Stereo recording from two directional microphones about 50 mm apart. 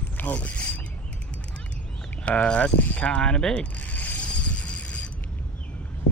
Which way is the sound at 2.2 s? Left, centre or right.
Left.